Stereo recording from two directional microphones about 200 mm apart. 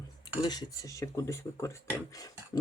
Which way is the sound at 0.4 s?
20° left (ahead or behind).